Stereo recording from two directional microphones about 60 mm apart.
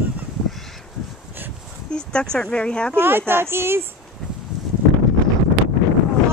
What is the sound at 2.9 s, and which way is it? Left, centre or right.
Speech, right.